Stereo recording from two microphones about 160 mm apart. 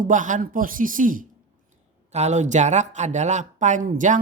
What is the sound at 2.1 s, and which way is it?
Speech, 45° right (ahead or behind).